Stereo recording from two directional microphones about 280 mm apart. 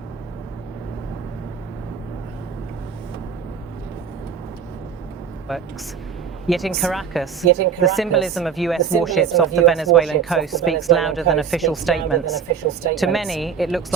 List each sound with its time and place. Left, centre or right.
5.5 s speech: centre